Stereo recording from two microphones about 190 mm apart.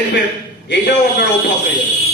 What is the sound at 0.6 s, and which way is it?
Speech, 60° left (ahead or behind).